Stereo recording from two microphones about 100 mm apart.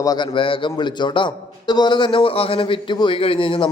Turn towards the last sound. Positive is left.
turn(degrees=60)  # may be behind; listen again after turning